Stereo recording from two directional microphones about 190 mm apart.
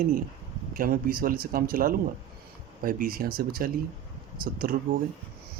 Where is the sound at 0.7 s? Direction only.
50° right (ahead or behind).